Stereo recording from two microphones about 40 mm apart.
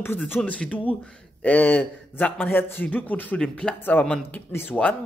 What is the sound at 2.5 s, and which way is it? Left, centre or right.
Speech, left.